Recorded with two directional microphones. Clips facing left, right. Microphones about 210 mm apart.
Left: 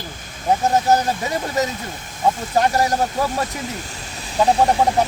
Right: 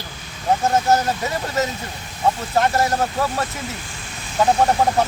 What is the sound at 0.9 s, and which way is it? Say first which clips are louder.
Speech: left 1 dB; 15° left (ahead or behind).